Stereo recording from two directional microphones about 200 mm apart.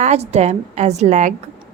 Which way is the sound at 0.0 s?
35° right (ahead or behind).